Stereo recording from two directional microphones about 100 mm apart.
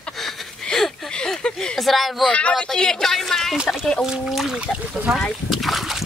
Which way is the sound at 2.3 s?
10° left (ahead or behind).